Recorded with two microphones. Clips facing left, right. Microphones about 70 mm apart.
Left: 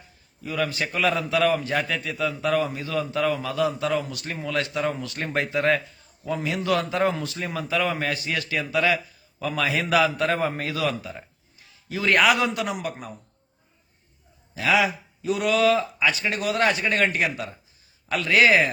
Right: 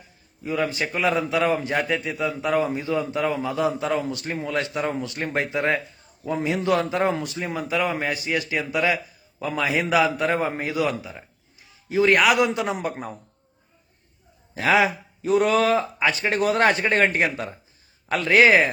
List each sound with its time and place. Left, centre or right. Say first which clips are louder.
0.4 s a man's voice: right 2 dB; right
11.7 s a sound: right 6 dB; right
12.1 s a man's voice: left 2 dB; centre
12.4 s a man's voice: right 3 dB; right
14.5 s a man's voice: right 2 dB; right